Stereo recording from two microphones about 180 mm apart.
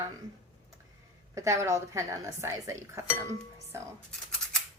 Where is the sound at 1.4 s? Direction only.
15° right (ahead or behind).